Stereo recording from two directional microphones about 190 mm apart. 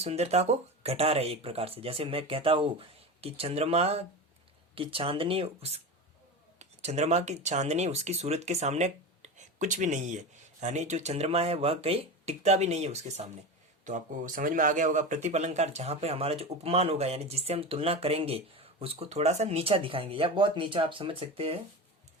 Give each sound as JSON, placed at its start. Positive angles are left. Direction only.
{"t": 0.0, "sound": "speech", "side_deg": -35}